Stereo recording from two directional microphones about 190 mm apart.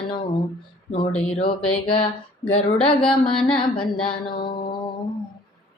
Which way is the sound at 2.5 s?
30° left (ahead or behind).